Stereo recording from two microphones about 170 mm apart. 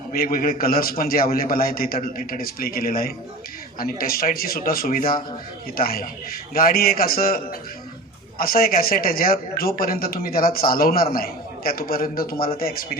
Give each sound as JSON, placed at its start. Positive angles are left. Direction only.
{"t": 0.1, "sound": "a man's voice", "side_deg": 60}